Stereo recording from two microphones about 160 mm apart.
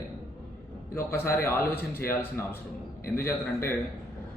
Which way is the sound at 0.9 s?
15° left (ahead or behind).